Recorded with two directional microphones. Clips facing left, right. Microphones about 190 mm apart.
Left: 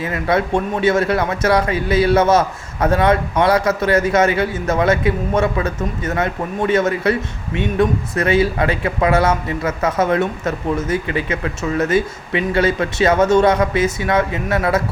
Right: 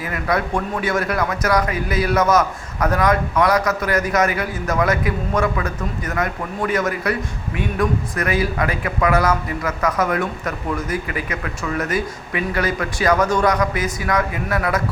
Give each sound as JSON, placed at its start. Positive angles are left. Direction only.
{"t": 0.0, "sound": "a man's voice", "side_deg": 25}